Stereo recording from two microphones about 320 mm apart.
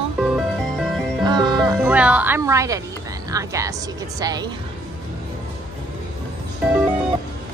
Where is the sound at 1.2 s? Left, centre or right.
Centre.